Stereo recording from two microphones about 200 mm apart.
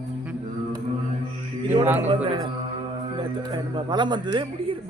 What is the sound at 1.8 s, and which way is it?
Speech, 10° right (ahead or behind).